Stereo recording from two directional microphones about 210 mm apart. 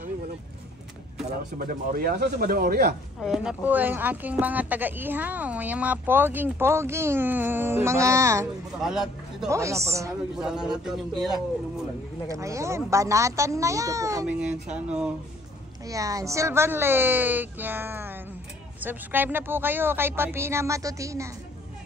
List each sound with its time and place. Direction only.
1.6 s speech: 40° right (ahead or behind)
3.2 s speech: 5° right (ahead or behind)
8.8 s a man's voice: centre (ahead or behind)
9.5 s speech: 15° right (ahead or behind)
10.3 s speech: 5° right (ahead or behind)
12.3 s speech: 15° right (ahead or behind)
14.2 s speech: 5° right (ahead or behind)
15.9 s speech: 15° right (ahead or behind)